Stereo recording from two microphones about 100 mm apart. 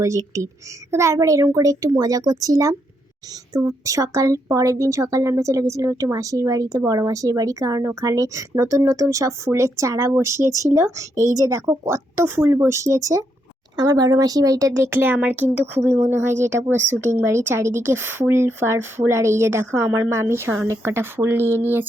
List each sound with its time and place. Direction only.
0.0 s speech: 30° right (ahead or behind)